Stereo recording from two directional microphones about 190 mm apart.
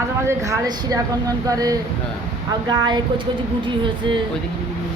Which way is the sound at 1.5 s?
20° right (ahead or behind).